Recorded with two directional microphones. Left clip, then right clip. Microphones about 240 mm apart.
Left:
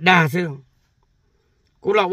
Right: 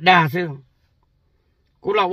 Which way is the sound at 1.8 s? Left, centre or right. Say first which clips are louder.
Left 1 dB; centre.